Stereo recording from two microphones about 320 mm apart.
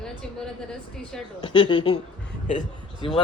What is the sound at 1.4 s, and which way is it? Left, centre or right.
Speech, centre.